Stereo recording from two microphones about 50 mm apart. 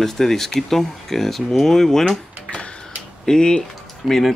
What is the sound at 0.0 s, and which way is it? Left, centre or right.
Speech, centre.